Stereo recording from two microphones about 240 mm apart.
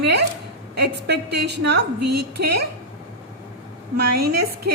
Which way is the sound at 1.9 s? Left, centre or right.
Right.